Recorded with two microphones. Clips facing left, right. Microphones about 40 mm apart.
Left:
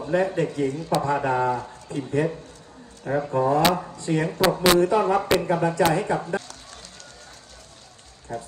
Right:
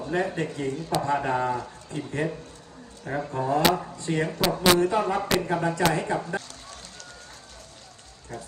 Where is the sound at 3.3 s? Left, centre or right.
Left.